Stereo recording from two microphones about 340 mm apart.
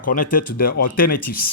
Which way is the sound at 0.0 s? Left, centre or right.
Left.